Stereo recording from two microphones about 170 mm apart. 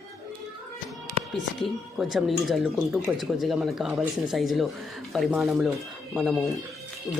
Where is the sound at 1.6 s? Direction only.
Centre (ahead or behind).